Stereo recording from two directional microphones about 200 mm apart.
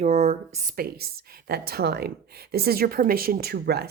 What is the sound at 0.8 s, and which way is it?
A woman's voice, 50° right (ahead or behind).